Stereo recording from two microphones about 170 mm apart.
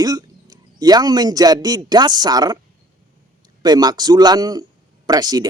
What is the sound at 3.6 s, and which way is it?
A man's voice, 25° right (ahead or behind).